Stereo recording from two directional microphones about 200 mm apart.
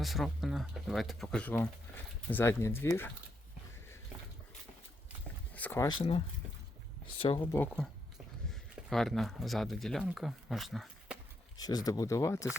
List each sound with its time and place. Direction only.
0.0 s speech: centre (ahead or behind)
5.5 s speech: 10° left (ahead or behind)
6.0 s speech: 25° left (ahead or behind)
7.3 s speech: 15° left (ahead or behind); by 11.2 s centre (ahead or behind)
11.5 s speech: 20° left (ahead or behind)